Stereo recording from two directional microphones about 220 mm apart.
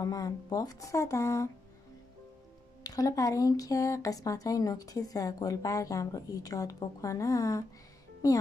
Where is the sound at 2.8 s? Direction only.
15° left (ahead or behind).